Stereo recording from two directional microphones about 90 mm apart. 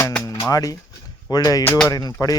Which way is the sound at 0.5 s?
40° left (ahead or behind).